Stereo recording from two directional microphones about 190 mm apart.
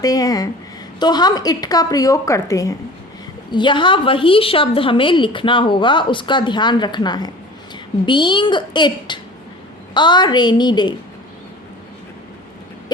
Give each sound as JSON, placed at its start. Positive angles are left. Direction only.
{"t": 0.0, "sound": "a woman's voice", "side_deg": 20}